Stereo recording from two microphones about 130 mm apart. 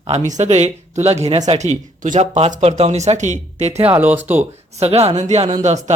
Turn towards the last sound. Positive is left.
turn(degrees=-60)  # may be behind; listen again after turning